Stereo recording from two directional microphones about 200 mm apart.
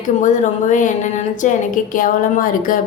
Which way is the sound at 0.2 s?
40° left (ahead or behind).